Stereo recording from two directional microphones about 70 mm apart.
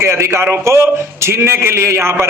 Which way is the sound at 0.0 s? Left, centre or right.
Right.